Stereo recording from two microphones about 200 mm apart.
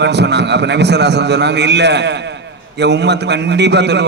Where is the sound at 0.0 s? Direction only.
60° right (ahead or behind).